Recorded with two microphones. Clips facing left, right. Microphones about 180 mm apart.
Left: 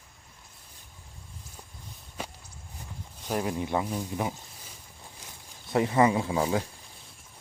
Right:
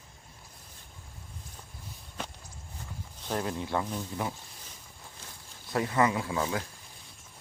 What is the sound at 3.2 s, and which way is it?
Speech, 10° left (ahead or behind).